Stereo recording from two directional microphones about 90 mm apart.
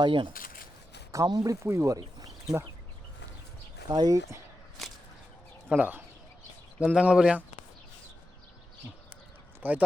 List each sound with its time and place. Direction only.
0.0 s speech: 65° right (ahead or behind)
1.1 s speech: 45° right (ahead or behind)
1.6 s speech: 30° right (ahead or behind)
2.0 s a sound: 45° right (ahead or behind)
3.8 s speech: 45° right (ahead or behind)
5.6 s speech: 15° right (ahead or behind)
9.6 s speech: 20° right (ahead or behind)